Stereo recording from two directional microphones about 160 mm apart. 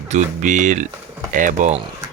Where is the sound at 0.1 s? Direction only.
50° right (ahead or behind).